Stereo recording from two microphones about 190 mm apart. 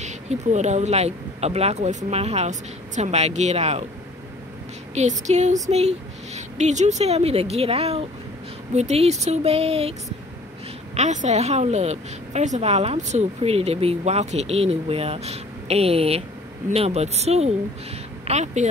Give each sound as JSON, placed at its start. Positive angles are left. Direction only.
{"t": 0.0, "sound": "a woman's voice", "side_deg": -35}
{"t": 4.9, "sound": "a woman's voice", "side_deg": -35}
{"t": 11.0, "sound": "a woman's voice", "side_deg": -40}